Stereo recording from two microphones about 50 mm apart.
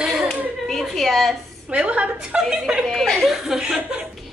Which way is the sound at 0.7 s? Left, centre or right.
Centre.